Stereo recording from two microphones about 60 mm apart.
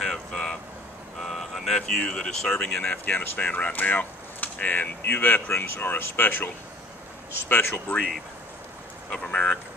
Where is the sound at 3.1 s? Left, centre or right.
Left.